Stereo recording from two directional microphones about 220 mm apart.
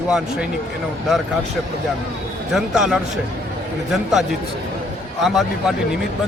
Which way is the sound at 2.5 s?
Centre (ahead or behind).